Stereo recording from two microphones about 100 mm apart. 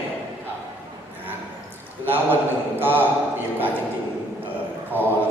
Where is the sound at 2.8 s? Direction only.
20° right (ahead or behind).